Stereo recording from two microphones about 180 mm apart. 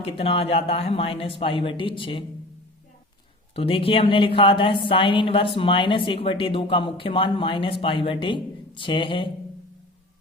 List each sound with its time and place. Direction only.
0.0 s speech: 35° left (ahead or behind)
3.5 s speech: 30° left (ahead or behind)